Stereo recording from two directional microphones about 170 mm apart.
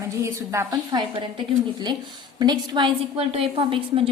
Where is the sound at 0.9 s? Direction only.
30° right (ahead or behind).